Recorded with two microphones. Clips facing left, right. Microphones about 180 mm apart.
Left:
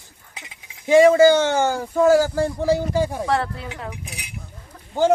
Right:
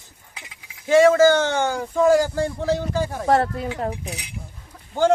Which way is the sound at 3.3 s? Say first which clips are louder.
Right 4 dB; 45° right (ahead or behind).